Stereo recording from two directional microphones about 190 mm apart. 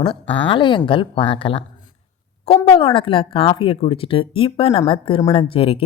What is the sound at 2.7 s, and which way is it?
Speech, 30° left (ahead or behind).